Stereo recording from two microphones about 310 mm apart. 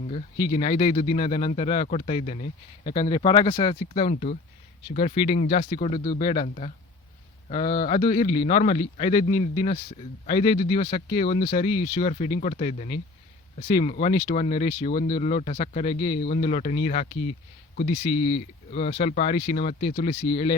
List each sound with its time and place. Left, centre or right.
0.1 s speech: centre
3.1 s speech: centre
3.8 s speech: left
6.1 s speech: left
8.0 s speech: centre
8.4 s speech: left
11.4 s speech: left
16.1 s speech: left
18.7 s speech: left